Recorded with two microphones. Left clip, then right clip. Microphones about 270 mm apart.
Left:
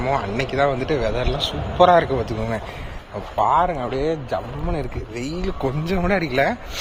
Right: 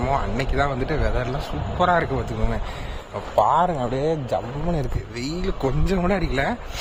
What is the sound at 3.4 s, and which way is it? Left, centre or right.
A man's voice, right.